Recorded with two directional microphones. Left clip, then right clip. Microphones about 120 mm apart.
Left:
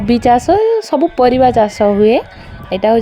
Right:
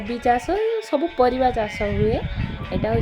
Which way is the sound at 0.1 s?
90° left.